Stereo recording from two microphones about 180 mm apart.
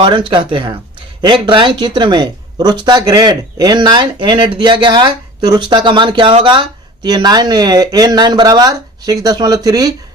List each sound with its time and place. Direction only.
0.0 s speech: 25° right (ahead or behind)